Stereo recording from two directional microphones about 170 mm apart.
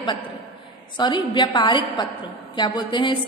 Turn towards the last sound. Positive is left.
turn(degrees=25)  # may be behind; listen again after turning